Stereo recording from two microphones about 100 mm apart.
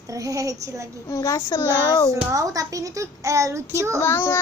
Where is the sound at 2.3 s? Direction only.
35° right (ahead or behind).